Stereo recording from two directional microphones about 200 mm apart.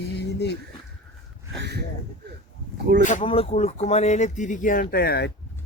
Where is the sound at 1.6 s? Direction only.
55° right (ahead or behind).